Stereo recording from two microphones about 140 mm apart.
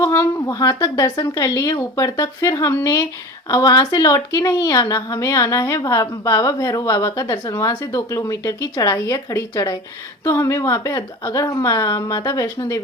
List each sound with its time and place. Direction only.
0.0 s a woman's voice: 20° left (ahead or behind)